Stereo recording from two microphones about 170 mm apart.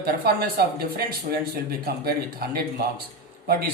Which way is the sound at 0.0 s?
65° right (ahead or behind).